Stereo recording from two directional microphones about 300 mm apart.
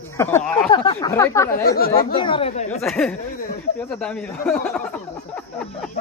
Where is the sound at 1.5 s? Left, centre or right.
Left.